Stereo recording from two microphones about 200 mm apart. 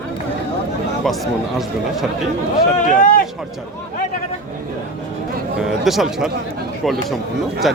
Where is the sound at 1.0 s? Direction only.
Centre (ahead or behind).